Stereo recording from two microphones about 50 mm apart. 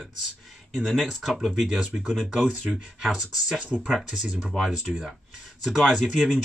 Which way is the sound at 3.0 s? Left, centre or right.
Centre.